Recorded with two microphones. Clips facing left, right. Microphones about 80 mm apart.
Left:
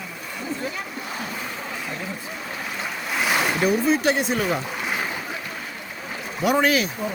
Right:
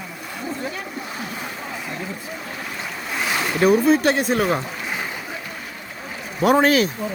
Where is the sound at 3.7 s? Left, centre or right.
Right.